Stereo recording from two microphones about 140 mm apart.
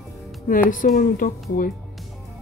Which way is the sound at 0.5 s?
75° left (ahead or behind).